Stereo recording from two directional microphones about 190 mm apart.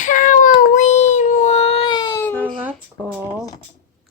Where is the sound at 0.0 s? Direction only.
40° left (ahead or behind); by 2.2 s 20° left (ahead or behind).